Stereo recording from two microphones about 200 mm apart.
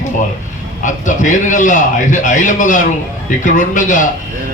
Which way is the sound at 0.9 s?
40° left (ahead or behind).